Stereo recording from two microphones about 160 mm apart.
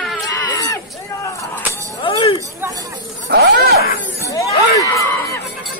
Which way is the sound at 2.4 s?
20° right (ahead or behind).